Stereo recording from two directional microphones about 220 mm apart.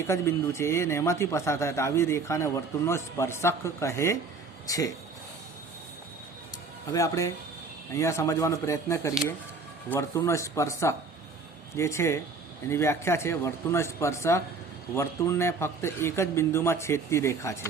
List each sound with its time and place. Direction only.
0.1 s speech: 10° left (ahead or behind)
6.9 s speech: 15° left (ahead or behind)